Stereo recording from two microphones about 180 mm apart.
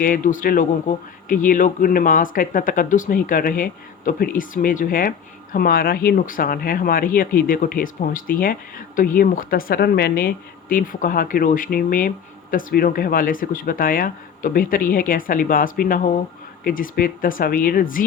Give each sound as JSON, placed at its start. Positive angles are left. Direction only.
{"t": 0.0, "sound": "speech", "side_deg": 50}